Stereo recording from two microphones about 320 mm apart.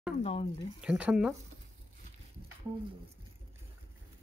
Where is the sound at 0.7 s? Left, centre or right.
Centre.